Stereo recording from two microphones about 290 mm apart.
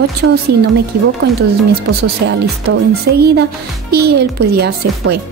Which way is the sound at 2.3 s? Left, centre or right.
Right.